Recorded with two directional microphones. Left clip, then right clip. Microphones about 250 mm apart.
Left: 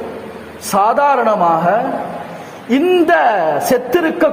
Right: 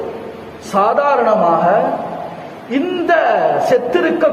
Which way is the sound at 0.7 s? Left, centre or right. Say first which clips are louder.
Left 1 dB; left.